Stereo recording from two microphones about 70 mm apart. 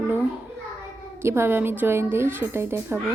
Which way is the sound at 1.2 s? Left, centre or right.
Right.